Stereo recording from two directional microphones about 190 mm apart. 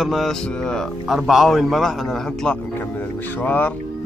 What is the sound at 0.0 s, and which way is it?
Speech, centre (ahead or behind).